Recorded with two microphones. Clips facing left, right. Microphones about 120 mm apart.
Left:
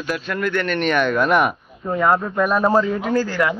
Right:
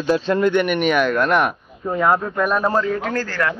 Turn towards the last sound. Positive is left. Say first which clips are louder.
# left 3 dB
turn(degrees=15)  # may be behind; listen again after turning